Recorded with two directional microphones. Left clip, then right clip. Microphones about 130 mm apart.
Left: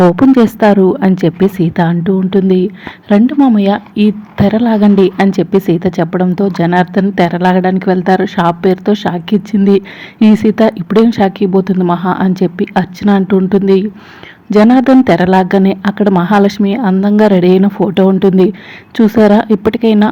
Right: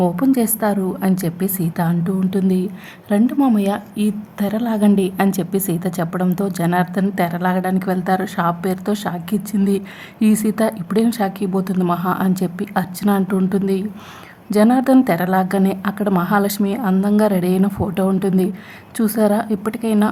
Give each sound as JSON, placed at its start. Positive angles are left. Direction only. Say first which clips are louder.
{"t": 0.0, "sound": "speech", "louder": "left 10 dB", "side_deg": 35}